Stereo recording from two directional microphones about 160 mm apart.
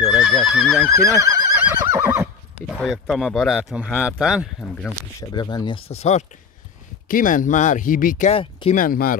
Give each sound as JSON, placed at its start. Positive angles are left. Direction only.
{"t": 0.0, "sound": "speech", "side_deg": 0}
{"t": 0.8, "sound": "speech", "side_deg": -20}
{"t": 1.8, "sound": "neigh", "side_deg": -15}
{"t": 2.7, "sound": "speech", "side_deg": 5}
{"t": 5.3, "sound": "speech", "side_deg": 25}
{"t": 7.1, "sound": "speech", "side_deg": 55}
{"t": 8.3, "sound": "speech", "side_deg": 35}
{"t": 8.7, "sound": "speech", "side_deg": 65}